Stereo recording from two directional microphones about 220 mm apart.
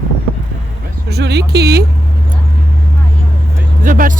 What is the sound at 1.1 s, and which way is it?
Speech, 50° right (ahead or behind).